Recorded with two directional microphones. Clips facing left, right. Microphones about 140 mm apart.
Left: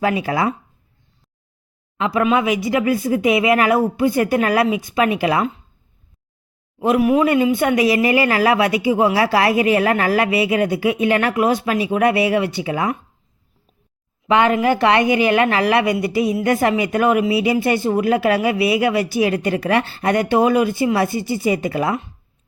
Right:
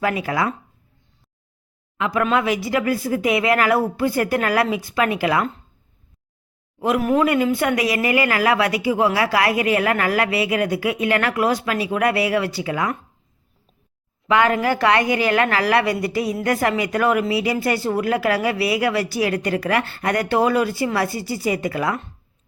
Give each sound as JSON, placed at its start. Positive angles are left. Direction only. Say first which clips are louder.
{"t": 0.0, "sound": "a woman's voice", "louder": "left 3 dB", "side_deg": 25}
{"t": 2.0, "sound": "a woman's voice", "louder": "left 3 dB", "side_deg": 25}
{"t": 6.7, "sound": "a woman's voice", "louder": "left 3 dB", "side_deg": 20}
{"t": 14.3, "sound": "a woman's voice", "louder": "left 3 dB", "side_deg": 25}